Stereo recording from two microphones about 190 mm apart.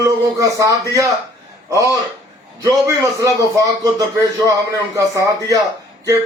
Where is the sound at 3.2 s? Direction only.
15° right (ahead or behind).